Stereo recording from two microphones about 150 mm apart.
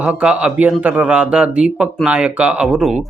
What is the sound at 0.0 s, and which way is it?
Speech, 5° right (ahead or behind).